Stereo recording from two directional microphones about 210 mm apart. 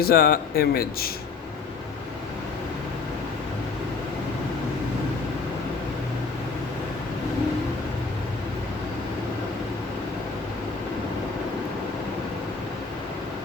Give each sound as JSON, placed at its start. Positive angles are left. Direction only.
{"t": 0.0, "sound": "speech", "side_deg": 45}